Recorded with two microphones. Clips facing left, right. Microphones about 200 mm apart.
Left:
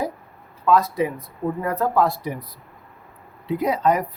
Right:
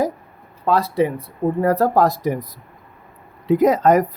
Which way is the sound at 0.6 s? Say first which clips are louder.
Right 1 dB; 30° right (ahead or behind).